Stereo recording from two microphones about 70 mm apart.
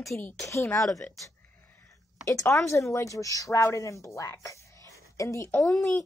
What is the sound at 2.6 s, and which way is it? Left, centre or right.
Speech, left.